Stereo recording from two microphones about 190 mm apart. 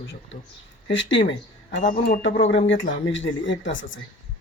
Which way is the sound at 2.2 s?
75° left (ahead or behind).